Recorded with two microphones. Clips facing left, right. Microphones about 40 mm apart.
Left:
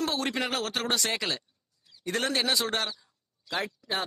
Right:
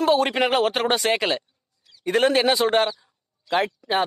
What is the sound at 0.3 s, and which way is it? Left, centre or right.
Speech, right.